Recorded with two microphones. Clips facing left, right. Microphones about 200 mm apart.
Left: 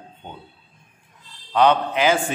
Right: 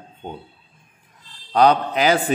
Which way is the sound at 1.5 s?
40° right (ahead or behind).